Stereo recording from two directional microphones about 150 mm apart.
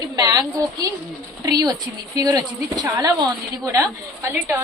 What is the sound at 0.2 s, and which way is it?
A woman's voice, 25° right (ahead or behind).